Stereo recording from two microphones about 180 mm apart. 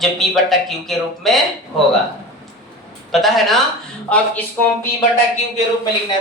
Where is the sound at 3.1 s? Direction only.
Centre (ahead or behind).